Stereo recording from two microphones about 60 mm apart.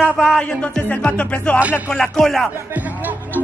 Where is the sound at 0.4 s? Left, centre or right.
Centre.